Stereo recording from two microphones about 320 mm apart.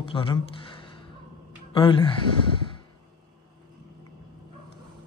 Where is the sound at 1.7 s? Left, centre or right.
Centre.